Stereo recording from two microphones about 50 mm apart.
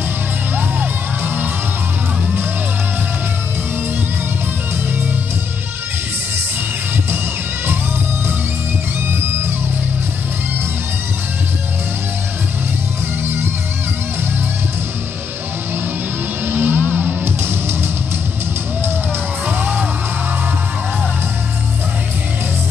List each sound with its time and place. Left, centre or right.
0.6 s music: right
16.4 s music: right